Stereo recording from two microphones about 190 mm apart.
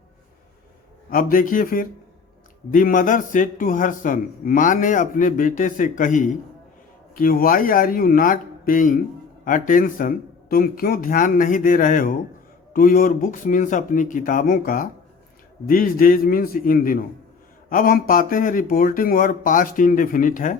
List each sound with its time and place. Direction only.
1.1 s a man's voice: 50° left (ahead or behind)